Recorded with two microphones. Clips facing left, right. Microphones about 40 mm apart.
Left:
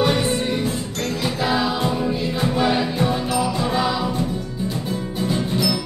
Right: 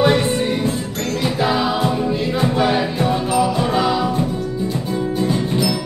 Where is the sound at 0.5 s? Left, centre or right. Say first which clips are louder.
Right 3 dB; right.